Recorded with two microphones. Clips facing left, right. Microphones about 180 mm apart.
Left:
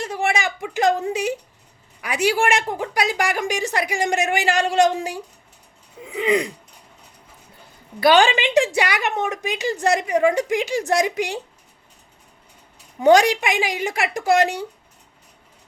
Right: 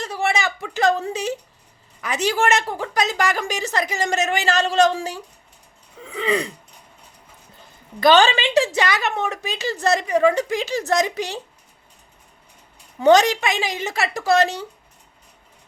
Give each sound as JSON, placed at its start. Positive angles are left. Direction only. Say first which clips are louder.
{"t": 0.0, "sound": "a sound", "louder": "even", "side_deg": 15}
{"t": 2.0, "sound": "a woman's voice", "louder": "left 1 dB", "side_deg": 10}
{"t": 8.0, "sound": "a woman's voice", "louder": "even", "side_deg": 15}
{"t": 13.0, "sound": "a woman's voice", "louder": "even", "side_deg": 15}